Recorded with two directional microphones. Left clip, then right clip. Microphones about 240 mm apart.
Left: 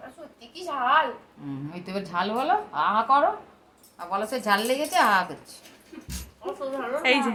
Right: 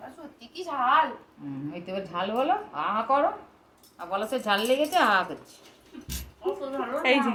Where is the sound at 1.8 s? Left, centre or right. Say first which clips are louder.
Left 3 dB; left.